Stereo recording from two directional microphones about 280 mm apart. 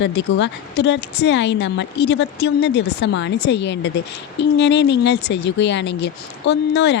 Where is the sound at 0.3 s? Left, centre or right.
Left.